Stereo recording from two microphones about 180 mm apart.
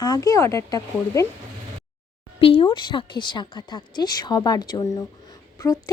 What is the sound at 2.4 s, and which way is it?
A woman's voice, 30° left (ahead or behind).